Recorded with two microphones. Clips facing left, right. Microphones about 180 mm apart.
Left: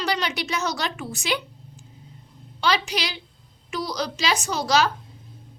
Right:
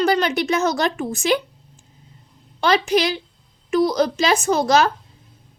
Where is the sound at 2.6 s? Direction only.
50° right (ahead or behind).